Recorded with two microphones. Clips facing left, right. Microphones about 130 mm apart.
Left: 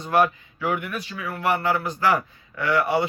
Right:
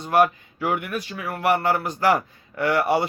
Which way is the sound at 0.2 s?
45° right (ahead or behind).